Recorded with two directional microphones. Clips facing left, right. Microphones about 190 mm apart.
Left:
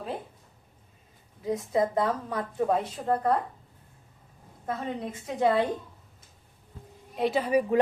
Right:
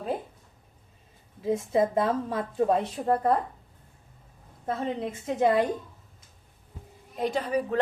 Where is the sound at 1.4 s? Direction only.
25° right (ahead or behind).